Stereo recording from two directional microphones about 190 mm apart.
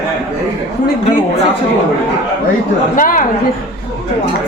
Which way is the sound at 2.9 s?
45° left (ahead or behind).